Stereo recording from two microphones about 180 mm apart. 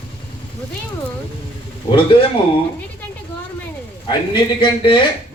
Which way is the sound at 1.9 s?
30° left (ahead or behind).